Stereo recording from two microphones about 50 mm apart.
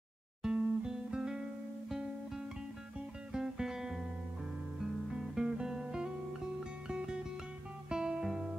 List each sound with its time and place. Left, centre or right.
0.4 s music: centre
4.7 s guitar: centre
6.9 s music: centre